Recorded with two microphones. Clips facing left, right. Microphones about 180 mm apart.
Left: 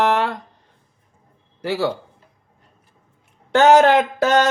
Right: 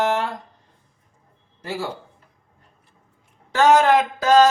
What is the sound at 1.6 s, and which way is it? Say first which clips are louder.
Mantra: left 7 dB; 70° left (ahead or behind).